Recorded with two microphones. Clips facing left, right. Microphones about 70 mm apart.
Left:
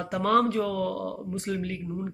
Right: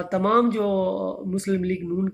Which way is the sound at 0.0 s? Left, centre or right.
Right.